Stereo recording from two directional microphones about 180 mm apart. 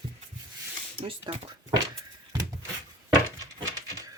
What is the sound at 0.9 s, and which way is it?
Speech, 30° right (ahead or behind).